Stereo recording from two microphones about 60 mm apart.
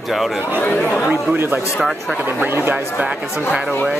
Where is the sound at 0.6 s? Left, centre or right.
Left.